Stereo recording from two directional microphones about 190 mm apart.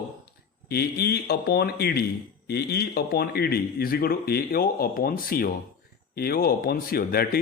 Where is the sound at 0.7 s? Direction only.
55° left (ahead or behind).